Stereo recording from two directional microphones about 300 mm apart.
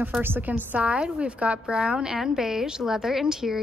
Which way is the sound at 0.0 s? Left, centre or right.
Centre.